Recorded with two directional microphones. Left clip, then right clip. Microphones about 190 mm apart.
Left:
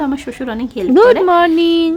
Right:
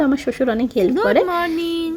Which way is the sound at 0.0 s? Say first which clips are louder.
Right 2 dB; 10° right (ahead or behind).